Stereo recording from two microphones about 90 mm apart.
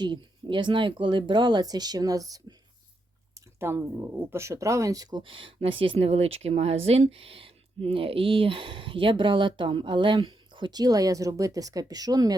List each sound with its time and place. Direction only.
0.0 s speech: 60° right (ahead or behind); by 5.0 s 40° right (ahead or behind)
5.1 s speech: 75° right (ahead or behind); by 12.4 s 45° right (ahead or behind)